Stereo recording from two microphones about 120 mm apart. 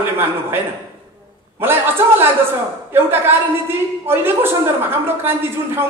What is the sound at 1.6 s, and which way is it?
A woman's voice, 20° right (ahead or behind).